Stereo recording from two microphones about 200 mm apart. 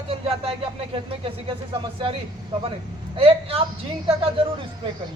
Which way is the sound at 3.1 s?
30° right (ahead or behind).